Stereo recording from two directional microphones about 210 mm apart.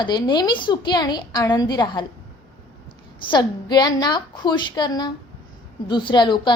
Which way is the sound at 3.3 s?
20° left (ahead or behind).